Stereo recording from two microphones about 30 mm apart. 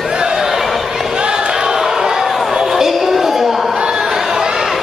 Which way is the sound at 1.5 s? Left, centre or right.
Right.